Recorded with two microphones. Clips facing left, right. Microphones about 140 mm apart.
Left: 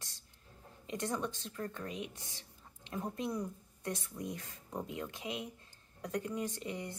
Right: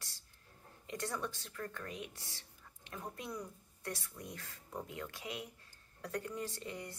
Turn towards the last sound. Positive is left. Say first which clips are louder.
# left 4 dB
turn(degrees=20)  # may be behind; listen again after turning